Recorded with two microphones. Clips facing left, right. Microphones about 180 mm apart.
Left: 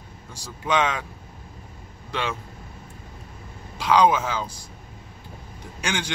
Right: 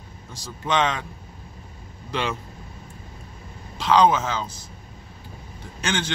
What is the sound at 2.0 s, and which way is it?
Speech, centre (ahead or behind).